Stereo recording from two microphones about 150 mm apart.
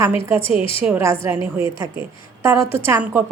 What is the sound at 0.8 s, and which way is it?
Speech, 15° right (ahead or behind).